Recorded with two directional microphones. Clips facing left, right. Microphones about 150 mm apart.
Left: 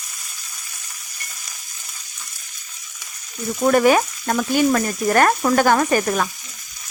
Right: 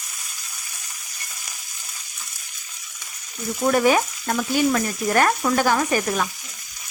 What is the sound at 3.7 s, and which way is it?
Frying, 60° left (ahead or behind).